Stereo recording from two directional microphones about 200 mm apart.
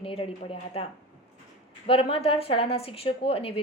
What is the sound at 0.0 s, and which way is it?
Speech, 30° left (ahead or behind).